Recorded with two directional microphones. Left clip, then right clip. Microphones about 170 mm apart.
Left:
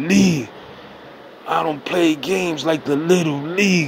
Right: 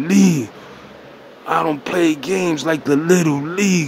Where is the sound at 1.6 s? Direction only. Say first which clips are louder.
Right 1 dB; 20° right (ahead or behind).